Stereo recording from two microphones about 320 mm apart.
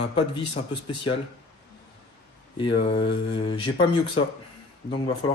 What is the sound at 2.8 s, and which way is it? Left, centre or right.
Speech, centre.